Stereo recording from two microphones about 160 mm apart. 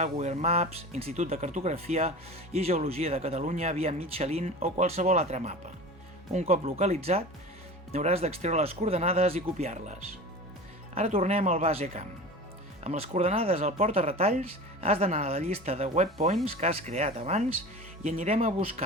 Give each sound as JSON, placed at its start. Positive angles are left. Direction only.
{"t": 0.0, "sound": "speech", "side_deg": -45}